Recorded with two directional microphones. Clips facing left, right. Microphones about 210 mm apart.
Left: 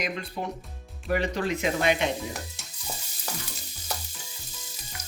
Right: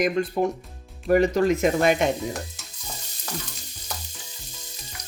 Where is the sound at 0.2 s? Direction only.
45° right (ahead or behind).